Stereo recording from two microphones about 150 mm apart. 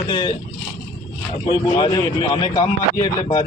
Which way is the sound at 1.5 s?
35° left (ahead or behind).